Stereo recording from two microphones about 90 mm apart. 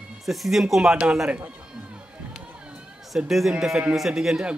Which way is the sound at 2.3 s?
5° right (ahead or behind).